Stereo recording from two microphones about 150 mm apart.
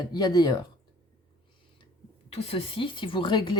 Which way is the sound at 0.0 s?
25° left (ahead or behind).